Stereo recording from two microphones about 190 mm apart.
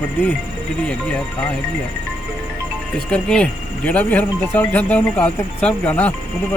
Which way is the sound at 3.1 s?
5° left (ahead or behind).